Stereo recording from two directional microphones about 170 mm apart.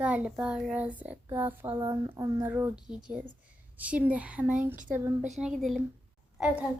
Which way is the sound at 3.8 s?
10° right (ahead or behind).